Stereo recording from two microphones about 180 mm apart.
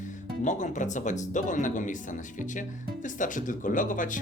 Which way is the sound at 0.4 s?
45° left (ahead or behind).